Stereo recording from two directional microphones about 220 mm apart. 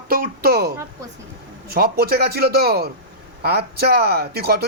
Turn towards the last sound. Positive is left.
turn(degrees=-45)  # may be behind; listen again after turning